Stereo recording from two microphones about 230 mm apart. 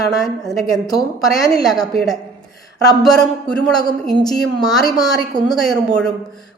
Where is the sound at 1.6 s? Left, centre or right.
Centre.